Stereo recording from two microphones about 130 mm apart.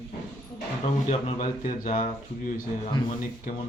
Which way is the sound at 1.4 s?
70° left (ahead or behind).